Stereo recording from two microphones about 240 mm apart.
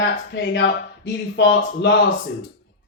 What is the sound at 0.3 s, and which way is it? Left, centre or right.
Speech, left.